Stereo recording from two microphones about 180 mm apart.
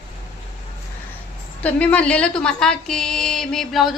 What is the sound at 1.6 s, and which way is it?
A woman's voice, 10° left (ahead or behind).